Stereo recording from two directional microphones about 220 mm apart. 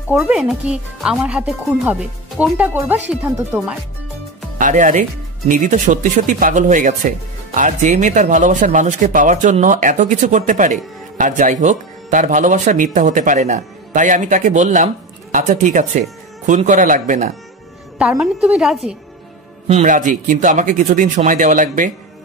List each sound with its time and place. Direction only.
0.1 s speech: 5° right (ahead or behind)
4.6 s speech: 35° right (ahead or behind)
17.9 s a woman's voice: 5° right (ahead or behind)
19.7 s speech: 35° right (ahead or behind)